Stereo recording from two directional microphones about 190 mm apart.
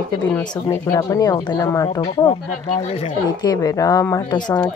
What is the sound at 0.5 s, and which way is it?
A woman's voice, 20° left (ahead or behind).